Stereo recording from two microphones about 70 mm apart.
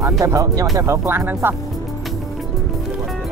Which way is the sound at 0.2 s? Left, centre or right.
Right.